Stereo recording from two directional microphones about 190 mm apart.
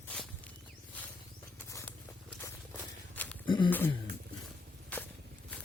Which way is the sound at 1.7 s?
15° left (ahead or behind).